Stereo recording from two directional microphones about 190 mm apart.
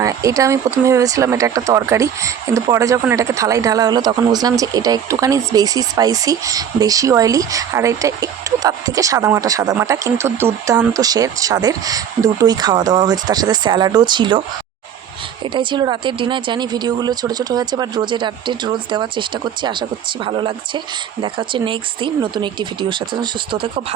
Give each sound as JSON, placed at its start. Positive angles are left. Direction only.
{"t": 0.0, "sound": "speech", "side_deg": -15}
{"t": 15.5, "sound": "speech", "side_deg": -25}